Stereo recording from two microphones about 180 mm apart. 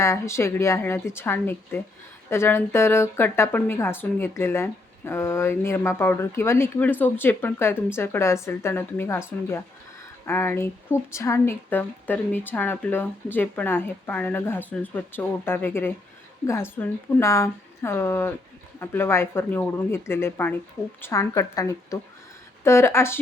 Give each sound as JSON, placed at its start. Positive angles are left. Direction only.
{"t": 0.0, "sound": "speech", "side_deg": 15}